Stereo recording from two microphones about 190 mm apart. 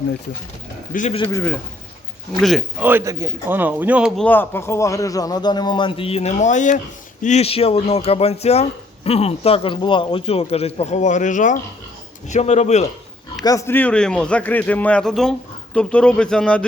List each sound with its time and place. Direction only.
0.9 s speech: 45° left (ahead or behind)
1.3 s speech: 15° left (ahead or behind)
2.4 s speech: centre (ahead or behind)
4.2 s a man's voice: 10° left (ahead or behind); by 12.9 s 35° left (ahead or behind)
13.4 s a man's voice: 15° left (ahead or behind)